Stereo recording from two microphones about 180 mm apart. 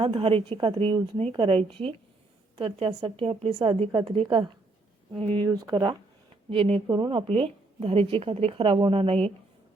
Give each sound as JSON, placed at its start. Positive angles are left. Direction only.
{"t": 0.0, "sound": "a woman's voice", "side_deg": -30}